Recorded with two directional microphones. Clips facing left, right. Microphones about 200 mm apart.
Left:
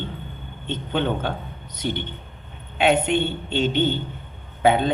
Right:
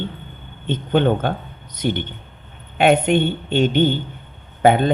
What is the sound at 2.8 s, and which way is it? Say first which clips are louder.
Speech: right 4 dB; 55° right (ahead or behind).